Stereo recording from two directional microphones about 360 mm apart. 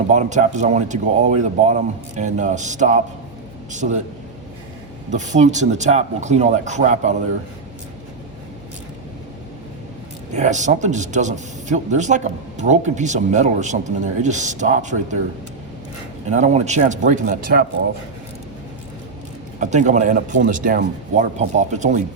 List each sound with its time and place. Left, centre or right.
0.1 s a man's voice: centre
5.1 s a man's voice: centre
10.3 s a man's voice: centre
16.3 s a man's voice: centre
19.5 s a man's voice: centre